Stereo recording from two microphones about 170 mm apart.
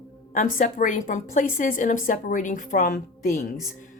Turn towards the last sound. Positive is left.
turn(degrees=55)  # may be behind; listen again after turning